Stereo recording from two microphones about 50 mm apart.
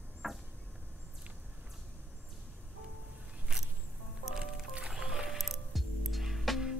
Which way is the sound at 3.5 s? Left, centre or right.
Centre.